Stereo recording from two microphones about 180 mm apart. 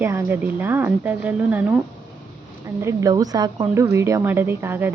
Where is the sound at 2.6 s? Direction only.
15° right (ahead or behind).